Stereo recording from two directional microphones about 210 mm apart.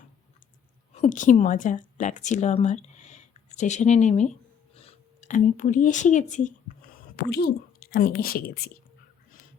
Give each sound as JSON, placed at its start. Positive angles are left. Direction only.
{"t": 0.9, "sound": "speech", "side_deg": 35}
{"t": 7.3, "sound": "speech", "side_deg": 50}